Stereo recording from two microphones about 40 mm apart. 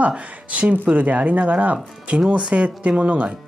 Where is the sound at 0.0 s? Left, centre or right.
Right.